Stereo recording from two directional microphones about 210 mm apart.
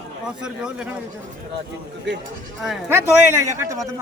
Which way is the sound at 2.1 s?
55° right (ahead or behind).